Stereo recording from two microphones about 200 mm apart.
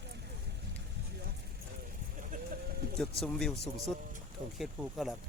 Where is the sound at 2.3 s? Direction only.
40° right (ahead or behind).